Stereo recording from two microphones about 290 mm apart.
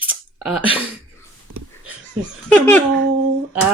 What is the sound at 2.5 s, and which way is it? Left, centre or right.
Speech, centre.